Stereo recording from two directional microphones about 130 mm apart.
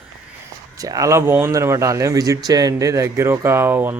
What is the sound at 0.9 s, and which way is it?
Speech, 25° right (ahead or behind).